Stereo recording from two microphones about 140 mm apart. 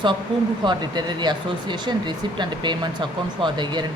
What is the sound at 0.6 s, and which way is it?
A woman's voice, 30° right (ahead or behind).